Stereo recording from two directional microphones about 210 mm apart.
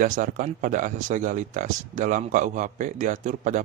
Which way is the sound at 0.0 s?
40° right (ahead or behind).